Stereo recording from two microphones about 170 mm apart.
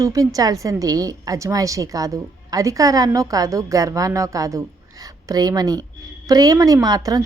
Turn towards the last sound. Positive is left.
turn(degrees=-20)  # may be behind; listen again after turning